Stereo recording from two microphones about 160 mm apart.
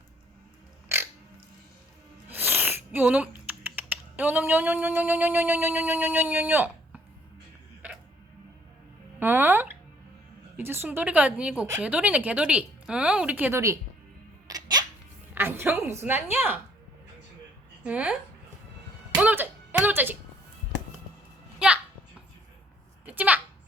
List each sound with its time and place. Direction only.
2.3 s speech: 10° right (ahead or behind)
9.1 s a woman's voice: 10° right (ahead or behind)
14.4 s music: 25° right (ahead or behind)
15.4 s a woman's voice: 15° right (ahead or behind)
17.8 s a woman's voice: 5° right (ahead or behind)
19.1 s music: 10° right (ahead or behind)
23.0 s a sound: 10° right (ahead or behind)